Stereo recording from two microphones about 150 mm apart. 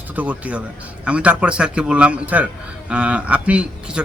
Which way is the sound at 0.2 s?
10° right (ahead or behind).